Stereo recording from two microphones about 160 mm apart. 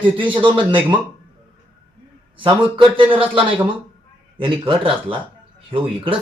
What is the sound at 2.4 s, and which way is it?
A man's voice, 30° right (ahead or behind).